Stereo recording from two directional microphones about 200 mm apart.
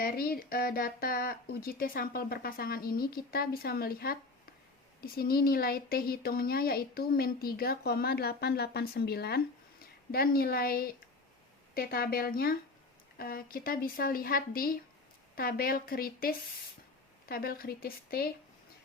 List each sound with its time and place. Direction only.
0.0 s speech: 45° left (ahead or behind)